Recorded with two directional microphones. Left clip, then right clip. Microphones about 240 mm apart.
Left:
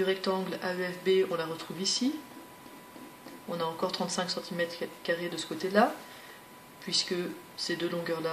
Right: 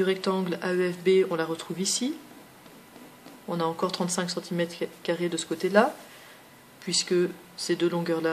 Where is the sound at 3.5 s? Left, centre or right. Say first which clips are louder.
Right 4 dB; right.